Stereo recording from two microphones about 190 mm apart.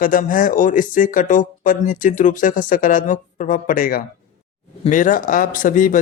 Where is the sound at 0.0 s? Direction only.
45° left (ahead or behind).